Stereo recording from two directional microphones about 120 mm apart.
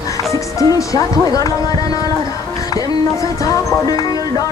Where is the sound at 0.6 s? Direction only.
30° left (ahead or behind).